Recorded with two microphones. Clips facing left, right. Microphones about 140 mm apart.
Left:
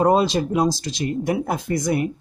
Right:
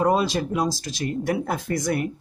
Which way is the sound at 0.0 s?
25° left (ahead or behind).